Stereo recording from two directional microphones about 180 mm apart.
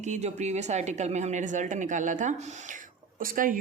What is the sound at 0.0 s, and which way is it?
A woman's voice, 40° right (ahead or behind).